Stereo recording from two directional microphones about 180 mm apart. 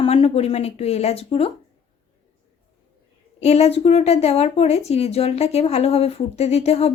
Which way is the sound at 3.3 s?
35° left (ahead or behind).